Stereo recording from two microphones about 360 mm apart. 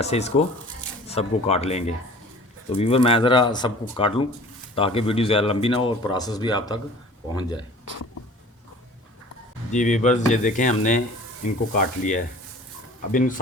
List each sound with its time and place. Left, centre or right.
0.0 s speech: centre
9.7 s speech: centre